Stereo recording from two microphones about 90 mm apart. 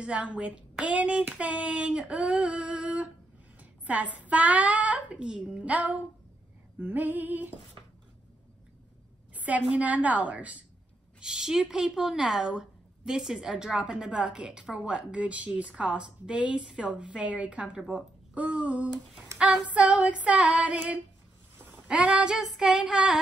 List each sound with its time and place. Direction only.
0.0 s a woman's voice: 15° right (ahead or behind)
6.8 s female singing: 20° right (ahead or behind)
9.3 s a woman's voice: 15° right (ahead or behind)
19.3 s child singing: 5° right (ahead or behind)
19.7 s a woman's voice: 15° right (ahead or behind)